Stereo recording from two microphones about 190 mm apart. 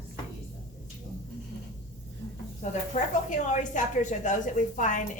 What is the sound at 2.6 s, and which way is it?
A woman's voice, 40° left (ahead or behind).